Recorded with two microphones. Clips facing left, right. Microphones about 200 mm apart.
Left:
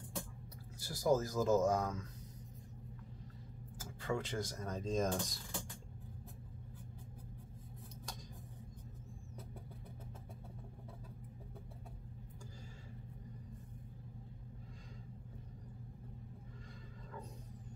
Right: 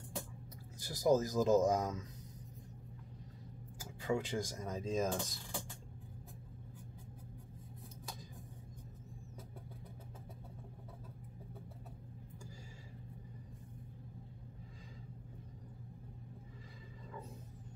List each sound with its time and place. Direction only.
0.8 s speech: 20° right (ahead or behind)
4.0 s speech: 10° right (ahead or behind)